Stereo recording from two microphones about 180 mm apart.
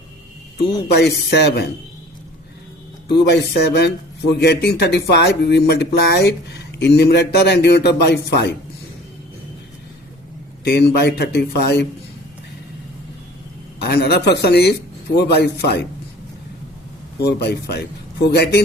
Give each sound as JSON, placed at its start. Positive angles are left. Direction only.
{"t": 0.9, "sound": "a man's voice", "side_deg": 70}
{"t": 3.1, "sound": "a man's voice", "side_deg": 70}
{"t": 10.6, "sound": "a man's voice", "side_deg": 65}
{"t": 13.8, "sound": "speech", "side_deg": 60}
{"t": 17.2, "sound": "speech", "side_deg": 65}